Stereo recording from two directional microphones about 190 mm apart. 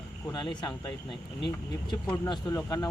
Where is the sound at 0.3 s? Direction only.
25° left (ahead or behind).